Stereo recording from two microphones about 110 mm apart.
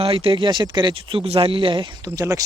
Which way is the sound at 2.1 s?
30° right (ahead or behind).